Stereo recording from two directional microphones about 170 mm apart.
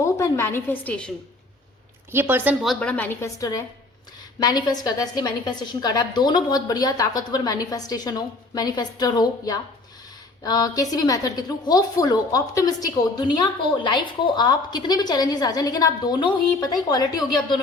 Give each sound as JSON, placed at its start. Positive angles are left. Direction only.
{"t": 0.0, "sound": "a woman's voice", "side_deg": 15}
{"t": 2.1, "sound": "a woman's voice", "side_deg": -10}